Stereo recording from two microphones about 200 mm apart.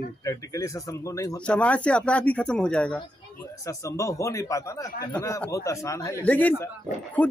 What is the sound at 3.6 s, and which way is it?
Speech, 15° left (ahead or behind).